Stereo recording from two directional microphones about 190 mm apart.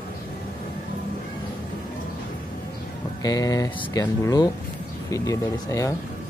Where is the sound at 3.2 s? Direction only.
20° left (ahead or behind).